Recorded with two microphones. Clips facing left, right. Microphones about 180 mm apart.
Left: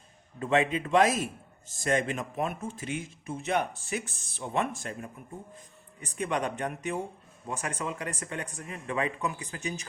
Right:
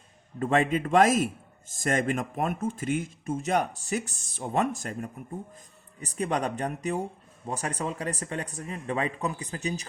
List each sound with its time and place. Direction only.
0.3 s a man's voice: 45° right (ahead or behind)
6.0 s speech: 35° right (ahead or behind)